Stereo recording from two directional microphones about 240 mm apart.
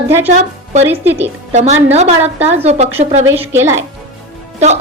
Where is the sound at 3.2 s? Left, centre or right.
Centre.